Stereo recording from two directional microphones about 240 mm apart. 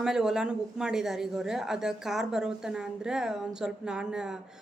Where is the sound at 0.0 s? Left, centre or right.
Centre.